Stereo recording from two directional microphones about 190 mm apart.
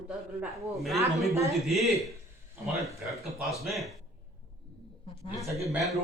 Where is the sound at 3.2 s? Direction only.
Centre (ahead or behind).